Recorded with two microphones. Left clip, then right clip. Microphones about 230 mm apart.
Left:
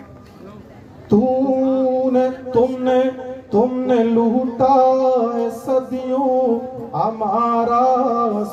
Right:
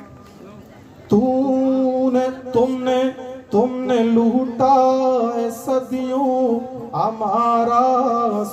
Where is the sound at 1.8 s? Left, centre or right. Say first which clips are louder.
Left 2 dB; right.